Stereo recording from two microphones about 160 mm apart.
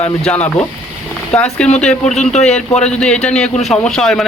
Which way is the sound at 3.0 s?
5° left (ahead or behind).